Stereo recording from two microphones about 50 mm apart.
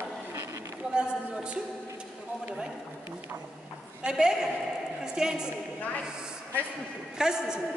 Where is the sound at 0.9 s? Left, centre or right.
Right.